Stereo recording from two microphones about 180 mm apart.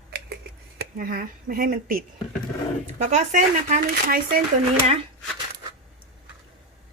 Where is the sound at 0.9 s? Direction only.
50° right (ahead or behind).